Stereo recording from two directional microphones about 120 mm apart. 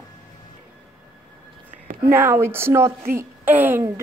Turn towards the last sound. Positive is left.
turn(degrees=-15)  # may be behind; listen again after turning